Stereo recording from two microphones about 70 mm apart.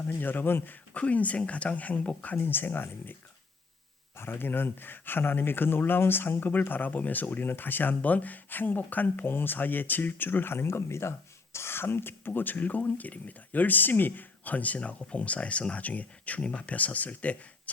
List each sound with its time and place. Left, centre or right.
0.1 s speech: left
4.2 s speech: left